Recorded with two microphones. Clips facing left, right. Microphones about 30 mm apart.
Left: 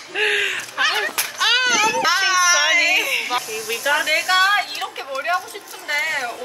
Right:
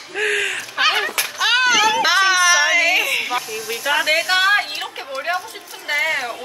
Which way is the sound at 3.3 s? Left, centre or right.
Centre.